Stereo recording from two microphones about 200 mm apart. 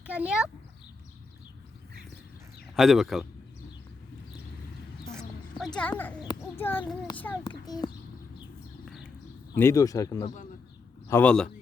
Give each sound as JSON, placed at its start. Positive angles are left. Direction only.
{"t": 0.1, "sound": "a man's voice", "side_deg": -5}
{"t": 2.7, "sound": "a man's voice", "side_deg": 0}
{"t": 5.5, "sound": "speech", "side_deg": 5}
{"t": 6.1, "sound": "a sound", "side_deg": 15}
{"t": 7.4, "sound": "a child's voice", "side_deg": 20}
{"t": 8.8, "sound": "a sound", "side_deg": 0}
{"t": 9.6, "sound": "speech", "side_deg": 15}
{"t": 11.1, "sound": "speech", "side_deg": 5}